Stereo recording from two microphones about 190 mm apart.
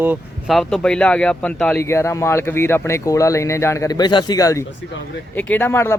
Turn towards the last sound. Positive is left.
turn(degrees=15)  # may be behind; listen again after turning